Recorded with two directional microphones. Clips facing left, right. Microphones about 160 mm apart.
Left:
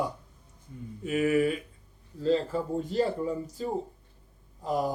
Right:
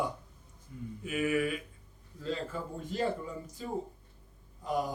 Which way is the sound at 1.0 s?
35° left (ahead or behind).